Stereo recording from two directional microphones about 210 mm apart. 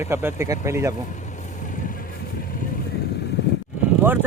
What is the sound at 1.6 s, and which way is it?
Vehicle, 40° left (ahead or behind).